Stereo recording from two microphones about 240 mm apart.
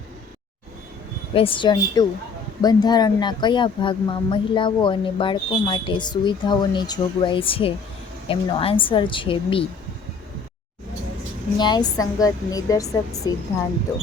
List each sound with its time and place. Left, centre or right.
1.3 s speech: left
11.5 s a woman's voice: centre